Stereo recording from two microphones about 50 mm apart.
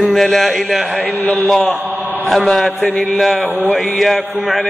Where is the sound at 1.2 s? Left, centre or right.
Left.